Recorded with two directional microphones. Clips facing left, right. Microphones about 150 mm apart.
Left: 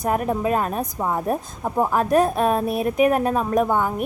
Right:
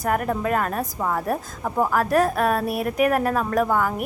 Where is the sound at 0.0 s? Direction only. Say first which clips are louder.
Left 1 dB; 20° left (ahead or behind).